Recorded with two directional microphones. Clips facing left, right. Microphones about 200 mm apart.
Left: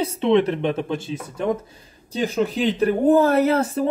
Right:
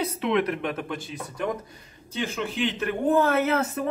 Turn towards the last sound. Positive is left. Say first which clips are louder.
# left 6 dB
turn(degrees=30)  # may be behind; listen again after turning